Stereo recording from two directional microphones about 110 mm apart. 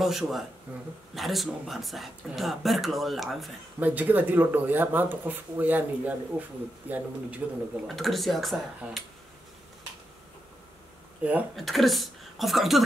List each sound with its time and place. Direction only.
0.0 s speech: centre (ahead or behind)
3.8 s speech: 15° right (ahead or behind)
7.8 s speech: centre (ahead or behind)
11.5 s speech: centre (ahead or behind)